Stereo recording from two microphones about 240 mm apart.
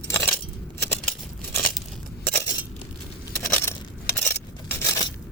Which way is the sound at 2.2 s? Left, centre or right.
Centre.